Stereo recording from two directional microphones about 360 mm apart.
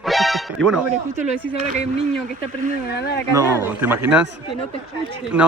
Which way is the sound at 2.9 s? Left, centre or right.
Left.